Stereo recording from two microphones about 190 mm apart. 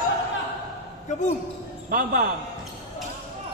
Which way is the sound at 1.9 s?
45° right (ahead or behind).